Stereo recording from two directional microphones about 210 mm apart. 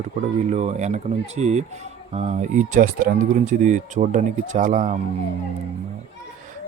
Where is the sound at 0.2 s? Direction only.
30° right (ahead or behind).